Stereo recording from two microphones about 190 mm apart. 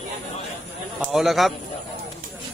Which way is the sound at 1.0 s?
Centre (ahead or behind).